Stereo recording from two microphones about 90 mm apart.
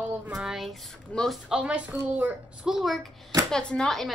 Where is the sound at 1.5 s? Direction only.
10° right (ahead or behind).